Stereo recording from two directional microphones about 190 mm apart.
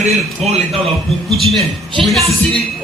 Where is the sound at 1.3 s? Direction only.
Centre (ahead or behind).